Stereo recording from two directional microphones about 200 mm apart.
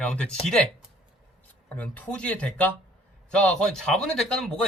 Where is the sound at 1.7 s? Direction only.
5° left (ahead or behind).